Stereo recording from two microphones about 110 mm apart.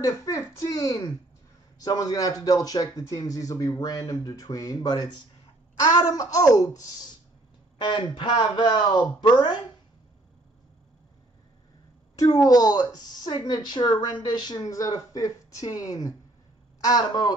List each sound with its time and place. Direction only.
0.0 s speech: 30° left (ahead or behind)
7.8 s a man's voice: 45° left (ahead or behind)
12.2 s speech: 35° left (ahead or behind)